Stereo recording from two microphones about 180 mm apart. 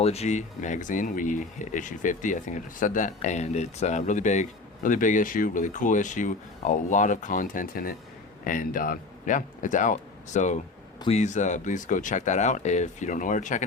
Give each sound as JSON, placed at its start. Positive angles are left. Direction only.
{"t": 0.0, "sound": "speech", "side_deg": 35}